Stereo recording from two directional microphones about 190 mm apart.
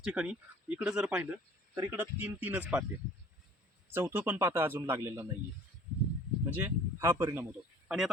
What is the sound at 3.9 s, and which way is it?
Speech, 10° right (ahead or behind).